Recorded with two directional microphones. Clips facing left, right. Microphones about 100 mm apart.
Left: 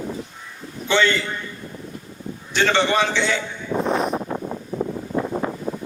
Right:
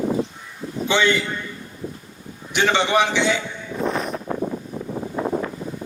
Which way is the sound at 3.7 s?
65° left (ahead or behind).